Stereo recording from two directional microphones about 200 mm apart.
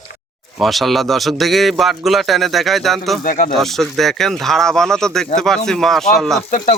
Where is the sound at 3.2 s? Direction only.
45° left (ahead or behind).